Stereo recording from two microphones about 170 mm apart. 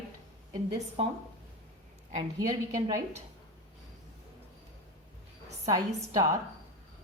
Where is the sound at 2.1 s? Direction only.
25° right (ahead or behind).